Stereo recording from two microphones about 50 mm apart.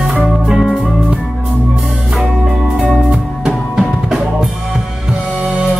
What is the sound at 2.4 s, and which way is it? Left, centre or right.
Music, centre.